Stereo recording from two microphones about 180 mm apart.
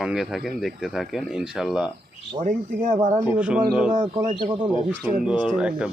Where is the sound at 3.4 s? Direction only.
5° right (ahead or behind).